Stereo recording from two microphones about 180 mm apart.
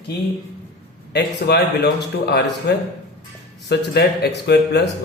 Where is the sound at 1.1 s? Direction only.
65° left (ahead or behind).